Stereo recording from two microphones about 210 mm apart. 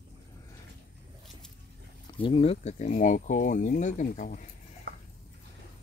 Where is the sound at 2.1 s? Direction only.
25° left (ahead or behind).